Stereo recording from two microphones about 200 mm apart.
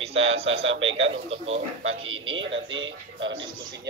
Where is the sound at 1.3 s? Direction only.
30° right (ahead or behind).